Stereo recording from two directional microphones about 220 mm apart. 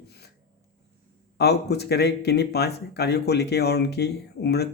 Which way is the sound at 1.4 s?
50° left (ahead or behind).